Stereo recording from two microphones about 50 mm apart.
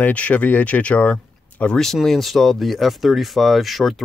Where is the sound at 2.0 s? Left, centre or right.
Centre.